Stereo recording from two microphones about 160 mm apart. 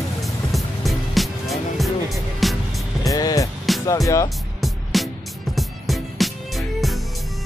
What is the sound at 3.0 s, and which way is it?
Music, 20° left (ahead or behind).